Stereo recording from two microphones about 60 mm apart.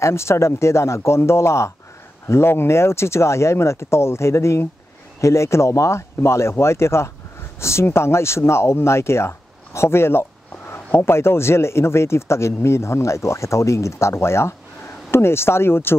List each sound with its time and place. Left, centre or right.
0.0 s speech: left